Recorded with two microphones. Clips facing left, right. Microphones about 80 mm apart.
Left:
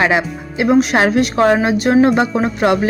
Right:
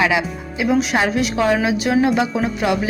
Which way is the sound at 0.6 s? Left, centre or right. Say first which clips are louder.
Left 5 dB; left.